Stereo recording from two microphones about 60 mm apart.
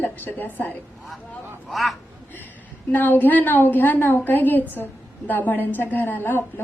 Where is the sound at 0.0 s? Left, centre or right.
Left.